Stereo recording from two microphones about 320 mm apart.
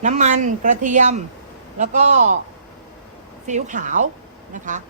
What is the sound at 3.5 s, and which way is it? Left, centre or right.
Speech, right.